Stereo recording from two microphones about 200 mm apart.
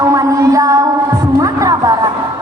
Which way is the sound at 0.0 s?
15° right (ahead or behind).